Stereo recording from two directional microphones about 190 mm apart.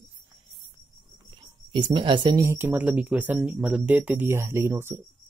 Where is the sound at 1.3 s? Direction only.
25° right (ahead or behind).